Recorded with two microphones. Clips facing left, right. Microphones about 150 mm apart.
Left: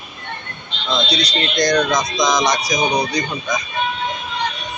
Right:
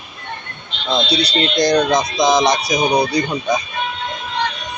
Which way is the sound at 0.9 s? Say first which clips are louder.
Right 3 dB; 30° right (ahead or behind).